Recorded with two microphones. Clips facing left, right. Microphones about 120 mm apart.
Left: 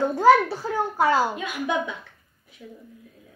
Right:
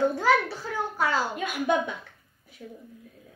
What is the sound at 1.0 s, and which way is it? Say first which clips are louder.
Speech: left 6 dB; 15° left (ahead or behind).